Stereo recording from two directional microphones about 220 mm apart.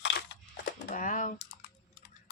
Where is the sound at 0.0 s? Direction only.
50° left (ahead or behind).